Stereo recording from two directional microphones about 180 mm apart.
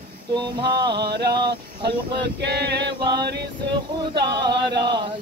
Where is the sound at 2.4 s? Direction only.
70° right (ahead or behind).